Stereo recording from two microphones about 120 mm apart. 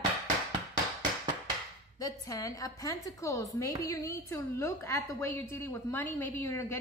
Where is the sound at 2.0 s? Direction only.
30° left (ahead or behind).